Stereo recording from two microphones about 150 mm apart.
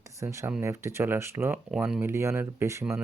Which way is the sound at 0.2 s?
20° right (ahead or behind).